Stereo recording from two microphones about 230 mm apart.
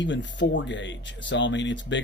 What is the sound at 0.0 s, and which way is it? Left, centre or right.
Speech, left.